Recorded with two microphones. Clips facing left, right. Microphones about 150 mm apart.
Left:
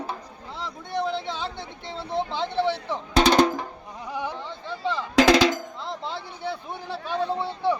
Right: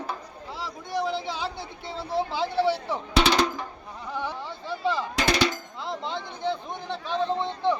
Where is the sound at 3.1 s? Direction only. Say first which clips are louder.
Left 4 dB; 45° left (ahead or behind).